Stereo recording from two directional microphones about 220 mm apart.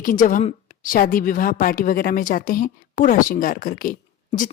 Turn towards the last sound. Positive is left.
turn(degrees=40)  # may be behind; listen again after turning